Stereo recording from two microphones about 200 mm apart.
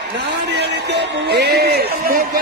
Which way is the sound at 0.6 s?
55° right (ahead or behind).